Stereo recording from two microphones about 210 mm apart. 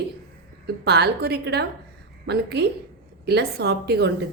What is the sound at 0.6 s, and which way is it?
A woman's voice, 50° right (ahead or behind).